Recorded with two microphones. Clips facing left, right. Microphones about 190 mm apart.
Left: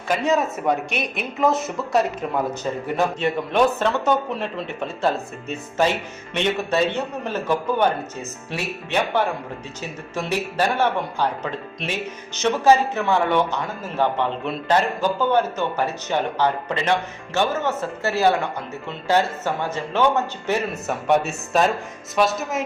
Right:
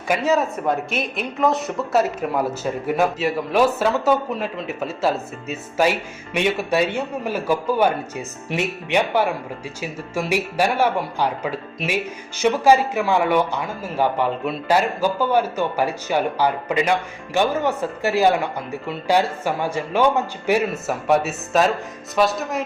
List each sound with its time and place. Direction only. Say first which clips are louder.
0.1 s speech: right 1 dB; centre (ahead or behind)